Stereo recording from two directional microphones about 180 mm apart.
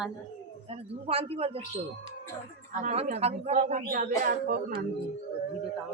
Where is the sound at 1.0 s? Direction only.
35° right (ahead or behind).